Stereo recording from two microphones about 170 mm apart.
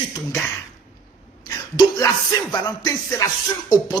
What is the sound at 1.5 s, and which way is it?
Music, 20° left (ahead or behind).